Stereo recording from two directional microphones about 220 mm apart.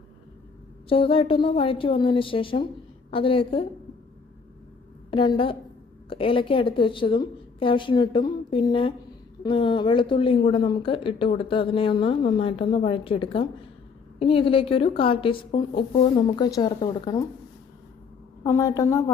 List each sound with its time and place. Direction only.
0.9 s a woman's voice: 25° left (ahead or behind)
5.1 s a woman's voice: 25° left (ahead or behind)
18.4 s a woman's voice: 15° left (ahead or behind)